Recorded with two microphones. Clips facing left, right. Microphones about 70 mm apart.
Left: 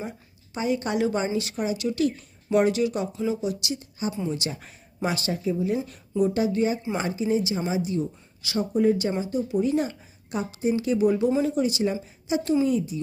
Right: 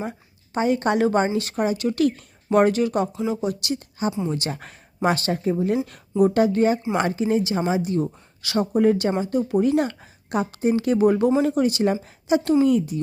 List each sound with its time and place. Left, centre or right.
0.5 s a woman's voice: right